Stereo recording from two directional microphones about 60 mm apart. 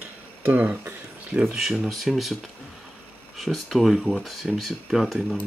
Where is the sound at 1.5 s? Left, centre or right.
Centre.